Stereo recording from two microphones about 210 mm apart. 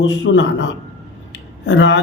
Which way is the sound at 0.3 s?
65° left (ahead or behind).